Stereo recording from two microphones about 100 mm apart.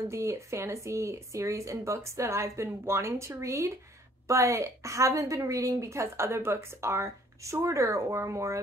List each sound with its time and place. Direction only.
0.1 s a woman's voice: 30° right (ahead or behind)